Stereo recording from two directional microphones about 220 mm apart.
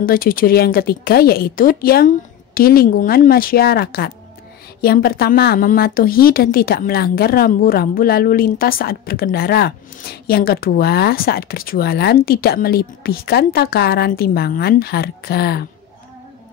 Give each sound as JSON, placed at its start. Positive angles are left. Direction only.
{"t": 0.0, "sound": "a woman's voice", "side_deg": 40}